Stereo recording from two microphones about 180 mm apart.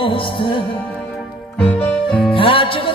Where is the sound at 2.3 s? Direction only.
30° left (ahead or behind).